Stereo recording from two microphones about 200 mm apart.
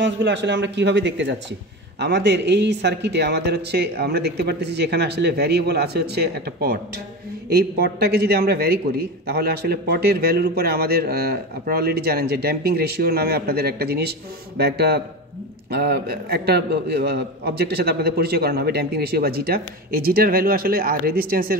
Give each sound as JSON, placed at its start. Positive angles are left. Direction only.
{"t": 0.0, "sound": "a man's voice", "side_deg": -65}